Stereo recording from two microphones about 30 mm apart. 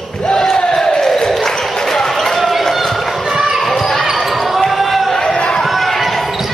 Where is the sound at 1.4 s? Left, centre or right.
Centre.